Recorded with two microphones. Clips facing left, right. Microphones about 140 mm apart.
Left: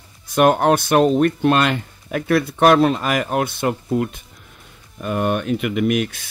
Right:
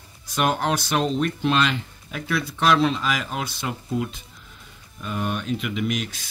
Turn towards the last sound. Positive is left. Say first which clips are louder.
# left 7 dB
turn(degrees=55)  # may be behind; listen again after turning